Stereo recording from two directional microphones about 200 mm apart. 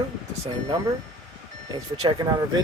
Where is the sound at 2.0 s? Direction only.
20° right (ahead or behind).